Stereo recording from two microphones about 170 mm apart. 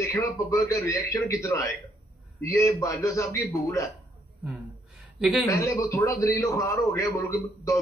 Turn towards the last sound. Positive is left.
turn(degrees=20)  # may be behind; listen again after turning